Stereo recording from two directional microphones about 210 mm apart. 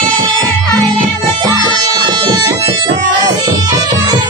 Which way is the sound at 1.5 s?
20° right (ahead or behind).